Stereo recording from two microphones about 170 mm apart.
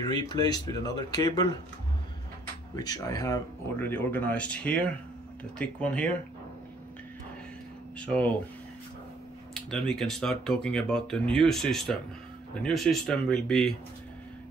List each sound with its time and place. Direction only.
0.0 s speech: 25° left (ahead or behind)
2.7 s speech: 20° left (ahead or behind)
8.0 s speech: 5° left (ahead or behind)
9.5 s speech: 5° left (ahead or behind)